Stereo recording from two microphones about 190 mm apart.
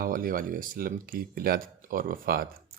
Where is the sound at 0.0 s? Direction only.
45° right (ahead or behind).